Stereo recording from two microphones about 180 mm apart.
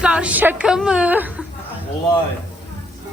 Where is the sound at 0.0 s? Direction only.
5° right (ahead or behind).